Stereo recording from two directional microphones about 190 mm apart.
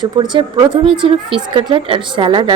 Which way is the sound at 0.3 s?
25° right (ahead or behind).